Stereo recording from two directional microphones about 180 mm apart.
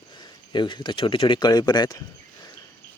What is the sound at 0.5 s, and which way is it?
Speech, 25° left (ahead or behind).